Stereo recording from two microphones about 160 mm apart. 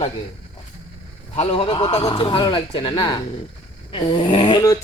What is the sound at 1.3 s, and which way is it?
Speech, 35° left (ahead or behind).